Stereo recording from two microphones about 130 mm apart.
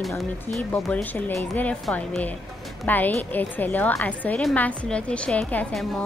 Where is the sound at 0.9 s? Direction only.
15° left (ahead or behind).